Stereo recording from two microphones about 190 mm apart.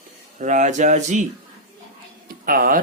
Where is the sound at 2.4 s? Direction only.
45° right (ahead or behind).